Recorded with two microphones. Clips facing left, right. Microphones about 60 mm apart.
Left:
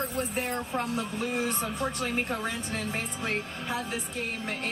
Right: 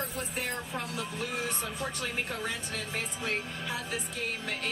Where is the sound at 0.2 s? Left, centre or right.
Left.